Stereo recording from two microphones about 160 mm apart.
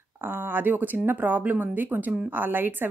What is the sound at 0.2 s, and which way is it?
Speech, 10° right (ahead or behind).